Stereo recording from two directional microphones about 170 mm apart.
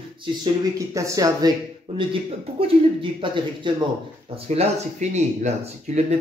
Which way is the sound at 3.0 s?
30° right (ahead or behind).